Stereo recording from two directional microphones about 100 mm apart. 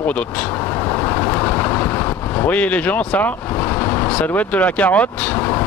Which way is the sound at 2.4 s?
15° left (ahead or behind).